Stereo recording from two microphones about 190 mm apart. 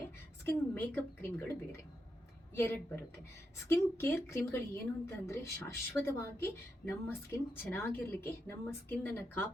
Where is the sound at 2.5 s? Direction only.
10° left (ahead or behind).